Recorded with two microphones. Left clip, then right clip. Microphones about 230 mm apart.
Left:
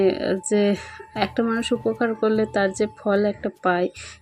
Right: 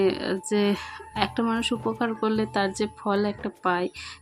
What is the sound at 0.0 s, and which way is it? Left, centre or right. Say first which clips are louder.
Speech: left 4 dB; centre.